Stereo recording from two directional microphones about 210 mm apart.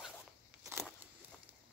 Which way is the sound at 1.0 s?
10° right (ahead or behind).